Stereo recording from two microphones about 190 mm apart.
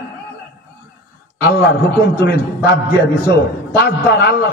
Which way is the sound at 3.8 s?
55° left (ahead or behind).